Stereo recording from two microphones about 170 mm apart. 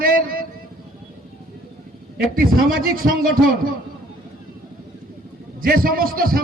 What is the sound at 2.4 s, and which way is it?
Speech, 60° right (ahead or behind).